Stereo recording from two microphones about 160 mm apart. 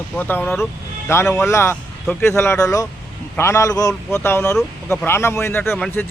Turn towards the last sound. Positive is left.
turn(degrees=10)  # may be behind; listen again after turning